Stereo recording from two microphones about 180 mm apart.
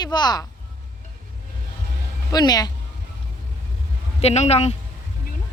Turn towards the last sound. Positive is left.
turn(degrees=35)  # may be behind; listen again after turning